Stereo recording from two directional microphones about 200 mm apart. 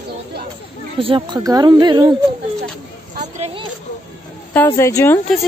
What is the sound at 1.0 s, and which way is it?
Speech, 25° right (ahead or behind).